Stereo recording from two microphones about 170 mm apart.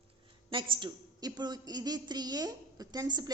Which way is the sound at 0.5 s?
30° right (ahead or behind).